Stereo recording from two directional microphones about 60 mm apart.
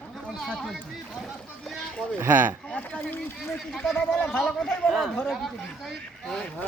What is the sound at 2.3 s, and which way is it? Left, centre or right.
Speech, right.